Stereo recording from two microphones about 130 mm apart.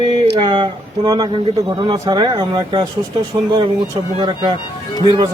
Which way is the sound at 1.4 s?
45° right (ahead or behind).